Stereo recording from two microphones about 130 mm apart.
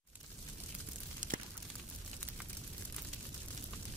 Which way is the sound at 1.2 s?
80° right.